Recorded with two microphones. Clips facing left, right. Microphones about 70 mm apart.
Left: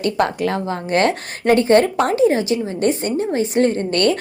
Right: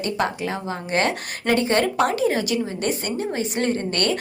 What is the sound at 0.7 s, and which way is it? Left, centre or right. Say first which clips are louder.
A woman's voice: left 3 dB; left.